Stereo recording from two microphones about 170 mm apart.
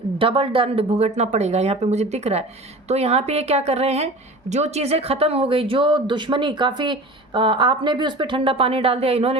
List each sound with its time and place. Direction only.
0.2 s a woman's voice: 30° right (ahead or behind)